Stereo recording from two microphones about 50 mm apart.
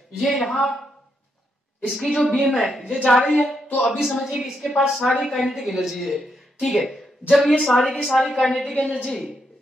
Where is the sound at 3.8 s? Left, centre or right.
Centre.